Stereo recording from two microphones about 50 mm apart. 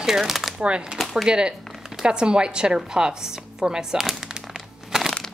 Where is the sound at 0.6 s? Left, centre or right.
Right.